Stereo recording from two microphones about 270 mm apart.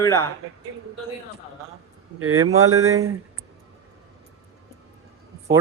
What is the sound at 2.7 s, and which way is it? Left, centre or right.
Speech, right.